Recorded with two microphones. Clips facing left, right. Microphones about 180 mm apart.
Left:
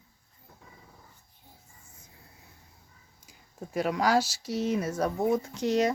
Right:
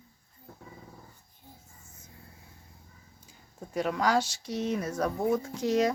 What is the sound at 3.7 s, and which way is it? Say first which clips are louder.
Speech: left 1 dB; 5° left (ahead or behind).